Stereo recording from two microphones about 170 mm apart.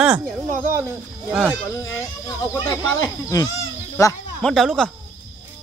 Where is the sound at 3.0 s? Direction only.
20° left (ahead or behind).